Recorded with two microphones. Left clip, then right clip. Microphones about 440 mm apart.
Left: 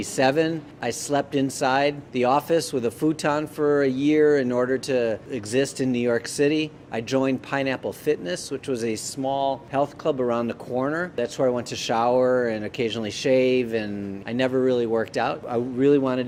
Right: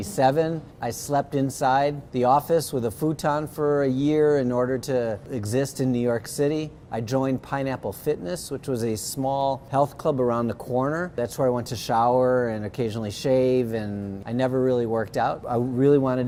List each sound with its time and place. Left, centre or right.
0.0 s speech: right